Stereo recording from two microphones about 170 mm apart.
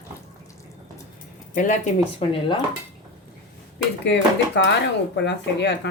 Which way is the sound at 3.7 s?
90° left.